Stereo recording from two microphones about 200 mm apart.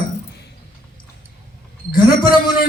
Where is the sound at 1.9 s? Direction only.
45° left (ahead or behind).